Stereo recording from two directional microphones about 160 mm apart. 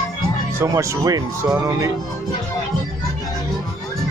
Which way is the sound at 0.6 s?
20° right (ahead or behind).